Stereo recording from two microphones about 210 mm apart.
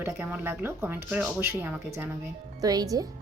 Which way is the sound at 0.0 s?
10° right (ahead or behind).